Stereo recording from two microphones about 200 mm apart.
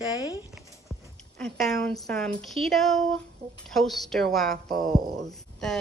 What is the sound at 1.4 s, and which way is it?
A woman's voice, 5° left (ahead or behind).